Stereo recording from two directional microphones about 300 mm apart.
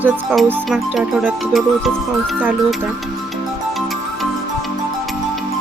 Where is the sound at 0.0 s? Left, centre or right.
Centre.